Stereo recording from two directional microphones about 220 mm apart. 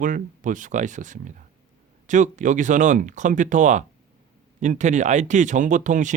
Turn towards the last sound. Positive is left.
turn(degrees=-35)  # may be behind; listen again after turning